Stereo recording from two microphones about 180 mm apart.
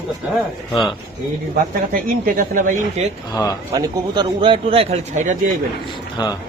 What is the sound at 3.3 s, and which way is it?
Speech, 20° left (ahead or behind).